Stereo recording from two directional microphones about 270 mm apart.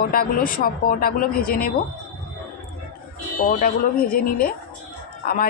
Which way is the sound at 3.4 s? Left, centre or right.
Left.